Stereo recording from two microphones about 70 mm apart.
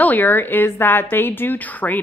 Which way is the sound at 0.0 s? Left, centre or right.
Left.